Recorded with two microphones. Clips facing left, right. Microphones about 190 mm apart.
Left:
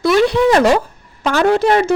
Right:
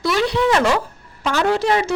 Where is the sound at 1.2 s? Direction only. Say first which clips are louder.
Left 5 dB; 55° left (ahead or behind).